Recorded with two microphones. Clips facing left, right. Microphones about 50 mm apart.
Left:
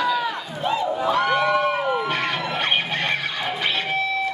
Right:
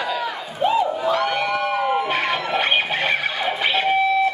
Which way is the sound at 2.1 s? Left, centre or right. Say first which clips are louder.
Right 3 dB; centre.